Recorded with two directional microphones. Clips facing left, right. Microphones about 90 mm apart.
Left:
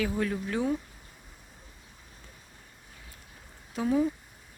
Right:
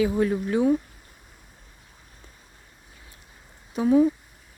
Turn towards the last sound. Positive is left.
turn(degrees=-15)  # may be behind; listen again after turning